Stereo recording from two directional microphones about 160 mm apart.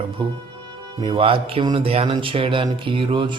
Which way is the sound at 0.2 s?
30° right (ahead or behind).